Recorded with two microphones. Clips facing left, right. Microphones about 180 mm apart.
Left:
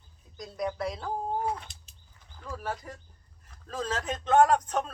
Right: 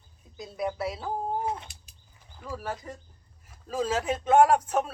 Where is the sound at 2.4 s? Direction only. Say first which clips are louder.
Right 1 dB; 5° right (ahead or behind).